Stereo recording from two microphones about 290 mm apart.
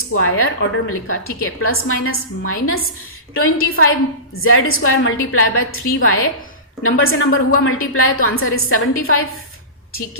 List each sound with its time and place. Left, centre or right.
0.2 s a woman's voice: left